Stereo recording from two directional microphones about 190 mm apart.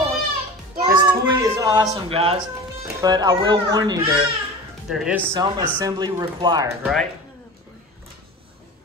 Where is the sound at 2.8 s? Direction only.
20° right (ahead or behind).